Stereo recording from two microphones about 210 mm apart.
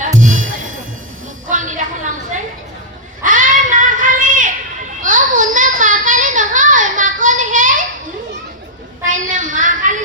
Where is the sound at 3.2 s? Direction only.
40° right (ahead or behind).